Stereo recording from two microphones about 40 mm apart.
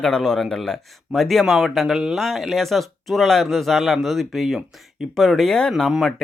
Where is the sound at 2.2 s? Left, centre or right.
Centre.